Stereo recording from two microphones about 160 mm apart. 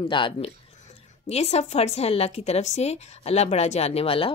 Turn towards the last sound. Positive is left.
turn(degrees=35)  # may be behind; listen again after turning